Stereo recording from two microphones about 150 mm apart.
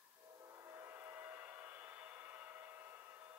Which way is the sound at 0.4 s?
20° right (ahead or behind).